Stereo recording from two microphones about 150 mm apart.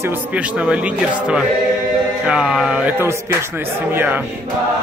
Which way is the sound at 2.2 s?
5° right (ahead or behind).